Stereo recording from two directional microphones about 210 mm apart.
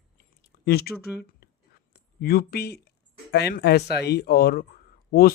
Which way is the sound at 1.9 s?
45° left (ahead or behind).